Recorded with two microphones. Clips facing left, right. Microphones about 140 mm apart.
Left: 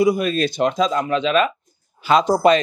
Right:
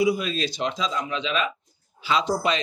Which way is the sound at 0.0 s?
50° left (ahead or behind).